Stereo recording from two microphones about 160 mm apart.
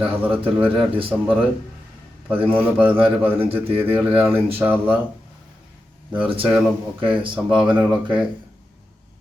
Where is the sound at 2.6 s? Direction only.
10° right (ahead or behind).